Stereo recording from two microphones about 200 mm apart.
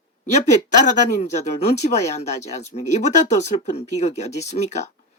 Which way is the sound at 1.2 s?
35° left (ahead or behind).